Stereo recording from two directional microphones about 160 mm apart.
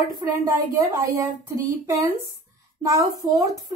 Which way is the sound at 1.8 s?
20° right (ahead or behind).